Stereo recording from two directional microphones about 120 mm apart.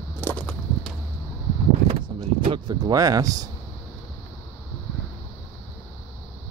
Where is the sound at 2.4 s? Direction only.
40° right (ahead or behind).